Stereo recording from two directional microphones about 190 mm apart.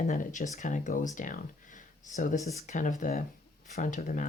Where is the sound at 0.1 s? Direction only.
45° left (ahead or behind).